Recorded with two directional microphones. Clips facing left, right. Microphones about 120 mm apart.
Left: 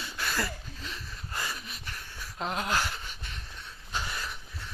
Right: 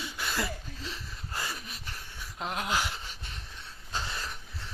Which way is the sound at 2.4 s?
5° right (ahead or behind).